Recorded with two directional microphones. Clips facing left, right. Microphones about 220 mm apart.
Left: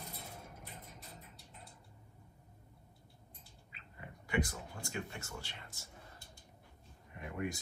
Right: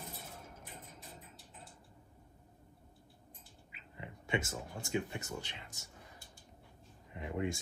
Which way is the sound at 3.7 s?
10° right (ahead or behind).